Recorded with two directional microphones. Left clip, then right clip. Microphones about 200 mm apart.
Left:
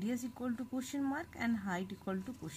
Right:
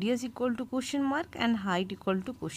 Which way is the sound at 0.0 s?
30° right (ahead or behind).